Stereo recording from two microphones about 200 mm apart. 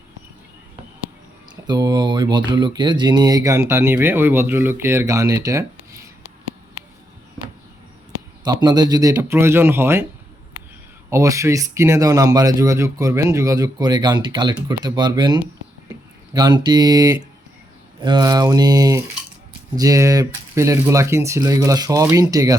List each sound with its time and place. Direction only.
1.6 s speech: 20° right (ahead or behind)
8.4 s speech: 20° right (ahead or behind)
11.1 s speech: 15° right (ahead or behind)